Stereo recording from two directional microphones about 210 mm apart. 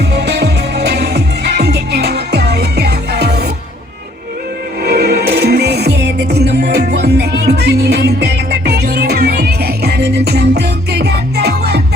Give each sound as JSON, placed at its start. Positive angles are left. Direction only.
{"t": 0.0, "sound": "music", "side_deg": -55}
{"t": 4.8, "sound": "music", "side_deg": -50}